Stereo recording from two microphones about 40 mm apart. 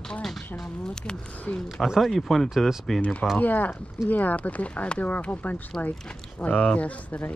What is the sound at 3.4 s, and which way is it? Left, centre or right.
Speech, left.